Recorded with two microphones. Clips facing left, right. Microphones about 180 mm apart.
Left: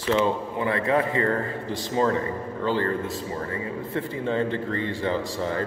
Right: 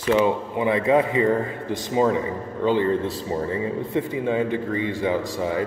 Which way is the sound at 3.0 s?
30° right (ahead or behind).